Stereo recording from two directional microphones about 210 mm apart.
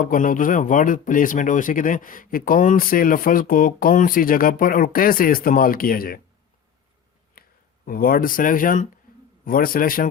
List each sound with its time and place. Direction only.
0.0 s speech: 40° left (ahead or behind)
7.4 s a sound: 45° left (ahead or behind)
7.9 s a man's voice: 45° left (ahead or behind)